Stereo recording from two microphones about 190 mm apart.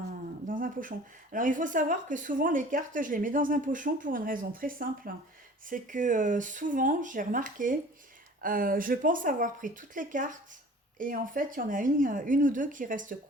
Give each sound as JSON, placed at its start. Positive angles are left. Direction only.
{"t": 0.4, "sound": "speech", "side_deg": -45}